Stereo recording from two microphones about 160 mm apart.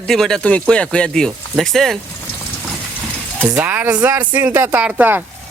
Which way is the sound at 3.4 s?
10° right (ahead or behind).